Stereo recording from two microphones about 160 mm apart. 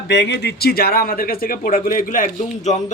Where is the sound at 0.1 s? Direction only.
90° left.